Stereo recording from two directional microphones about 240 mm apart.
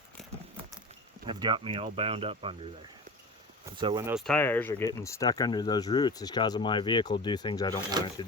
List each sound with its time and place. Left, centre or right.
1.3 s speech: centre
3.8 s speech: centre
4.1 s speech: centre